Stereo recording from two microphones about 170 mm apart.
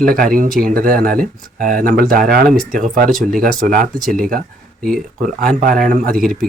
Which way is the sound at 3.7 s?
55° right (ahead or behind).